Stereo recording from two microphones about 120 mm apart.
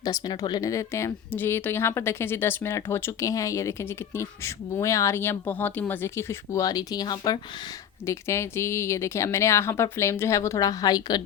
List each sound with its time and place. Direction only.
0.0 s speech: 35° left (ahead or behind)
8.0 s speech: 25° left (ahead or behind)